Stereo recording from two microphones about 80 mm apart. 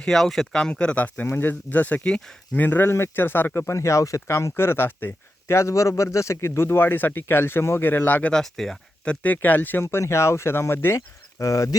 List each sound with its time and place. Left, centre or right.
0.0 s speech: centre
2.6 s speech: left
8.3 s speech: centre
9.2 s speech: left